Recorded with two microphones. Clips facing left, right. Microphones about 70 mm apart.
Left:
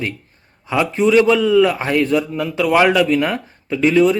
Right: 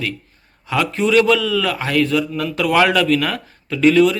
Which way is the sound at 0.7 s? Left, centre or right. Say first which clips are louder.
Left 2 dB; centre.